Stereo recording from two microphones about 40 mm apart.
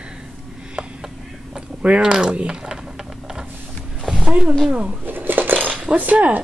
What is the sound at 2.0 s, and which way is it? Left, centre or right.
Speech, centre.